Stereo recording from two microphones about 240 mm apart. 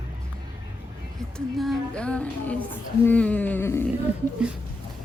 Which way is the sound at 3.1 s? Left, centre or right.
Centre.